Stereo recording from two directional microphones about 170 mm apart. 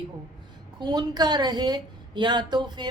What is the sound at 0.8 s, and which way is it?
A woman's voice, 25° right (ahead or behind).